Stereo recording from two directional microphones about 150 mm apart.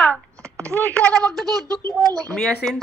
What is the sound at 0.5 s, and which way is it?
Speech, 20° right (ahead or behind).